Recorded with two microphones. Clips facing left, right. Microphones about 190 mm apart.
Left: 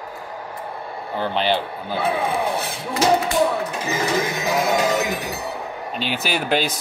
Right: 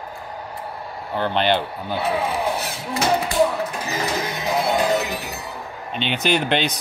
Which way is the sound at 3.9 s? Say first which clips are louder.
Left 6 dB; 45° left (ahead or behind).